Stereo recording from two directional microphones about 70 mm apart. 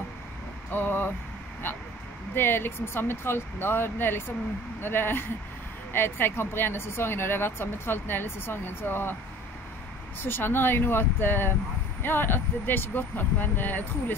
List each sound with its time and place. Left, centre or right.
0.7 s speech: left
2.3 s speech: left
10.2 s speech: left